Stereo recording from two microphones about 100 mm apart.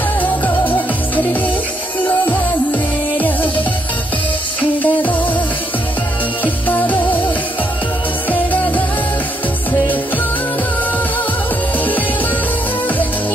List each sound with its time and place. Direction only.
0.2 s music: 15° left (ahead or behind)
4.6 s music: 15° left (ahead or behind)
6.4 s music: 15° left (ahead or behind)
8.3 s music: 15° left (ahead or behind)